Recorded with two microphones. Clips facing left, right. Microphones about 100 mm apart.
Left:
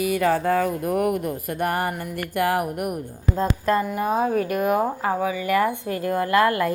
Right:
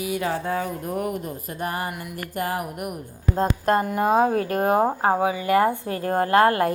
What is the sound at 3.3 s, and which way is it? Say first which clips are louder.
Speech: right 1 dB; 45° right (ahead or behind).